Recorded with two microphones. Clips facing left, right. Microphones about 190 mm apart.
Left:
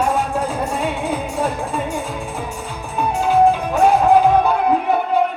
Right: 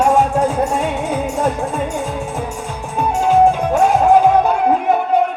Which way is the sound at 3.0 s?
45° right (ahead or behind).